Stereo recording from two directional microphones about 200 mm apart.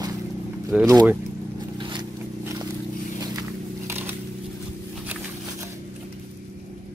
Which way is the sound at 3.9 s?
10° right (ahead or behind).